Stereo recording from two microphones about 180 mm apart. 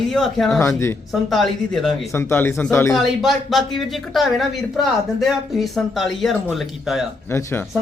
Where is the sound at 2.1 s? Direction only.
15° left (ahead or behind).